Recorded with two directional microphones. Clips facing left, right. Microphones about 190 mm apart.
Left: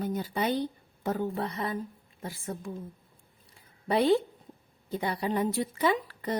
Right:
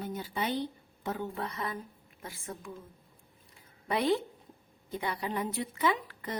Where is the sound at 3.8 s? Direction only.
35° left (ahead or behind).